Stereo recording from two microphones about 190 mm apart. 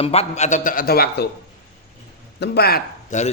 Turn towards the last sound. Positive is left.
turn(degrees=40)  # may be behind; listen again after turning